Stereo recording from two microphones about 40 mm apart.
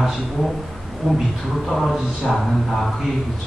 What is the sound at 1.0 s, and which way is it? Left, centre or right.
Speech, centre.